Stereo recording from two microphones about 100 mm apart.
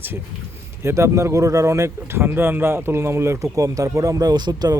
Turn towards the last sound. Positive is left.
turn(degrees=-40)  # may be behind; listen again after turning